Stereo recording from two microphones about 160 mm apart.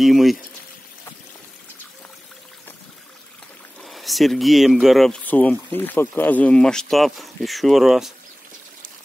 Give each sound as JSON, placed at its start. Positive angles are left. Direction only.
{"t": 0.0, "sound": "speech", "side_deg": 0}
{"t": 3.8, "sound": "speech", "side_deg": 0}